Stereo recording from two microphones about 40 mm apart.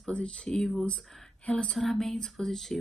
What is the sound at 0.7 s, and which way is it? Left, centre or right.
A woman's voice, left.